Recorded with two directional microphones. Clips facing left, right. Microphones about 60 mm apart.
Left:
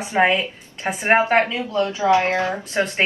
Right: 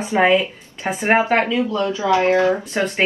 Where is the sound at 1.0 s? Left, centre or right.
Left.